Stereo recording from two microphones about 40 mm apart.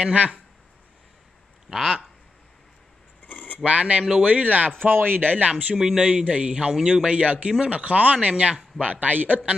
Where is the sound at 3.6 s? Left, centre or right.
Right.